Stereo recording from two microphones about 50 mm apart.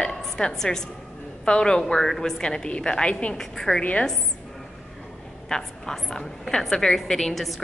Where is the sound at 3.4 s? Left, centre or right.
Centre.